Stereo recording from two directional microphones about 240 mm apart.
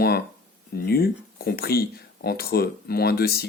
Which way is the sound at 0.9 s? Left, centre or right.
Left.